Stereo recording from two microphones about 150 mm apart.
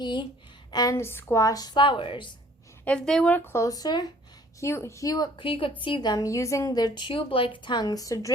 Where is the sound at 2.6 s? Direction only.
10° left (ahead or behind).